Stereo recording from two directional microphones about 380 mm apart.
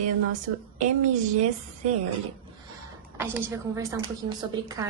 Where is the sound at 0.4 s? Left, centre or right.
Centre.